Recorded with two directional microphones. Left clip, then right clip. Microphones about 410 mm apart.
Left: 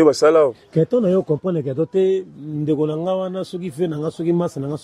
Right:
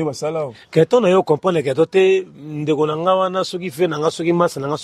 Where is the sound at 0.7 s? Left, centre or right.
Right.